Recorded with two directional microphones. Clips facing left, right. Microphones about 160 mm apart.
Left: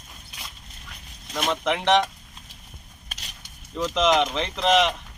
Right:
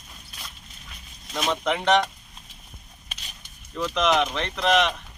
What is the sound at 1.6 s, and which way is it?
Speech, 15° left (ahead or behind).